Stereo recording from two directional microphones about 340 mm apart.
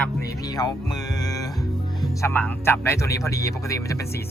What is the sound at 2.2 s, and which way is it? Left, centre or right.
Speech, centre.